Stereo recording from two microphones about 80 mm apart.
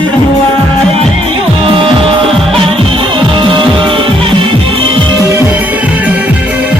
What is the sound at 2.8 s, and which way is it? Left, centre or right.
Music, right.